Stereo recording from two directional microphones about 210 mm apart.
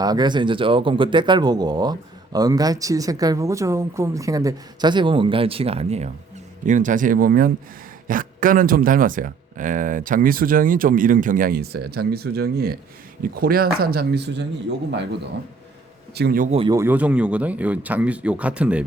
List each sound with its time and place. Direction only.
0.0 s speech: 20° right (ahead or behind); by 14.4 s 55° right (ahead or behind)
16.1 s speech: 45° right (ahead or behind)
16.5 s speech: 25° right (ahead or behind)
16.7 s speech: 10° right (ahead or behind)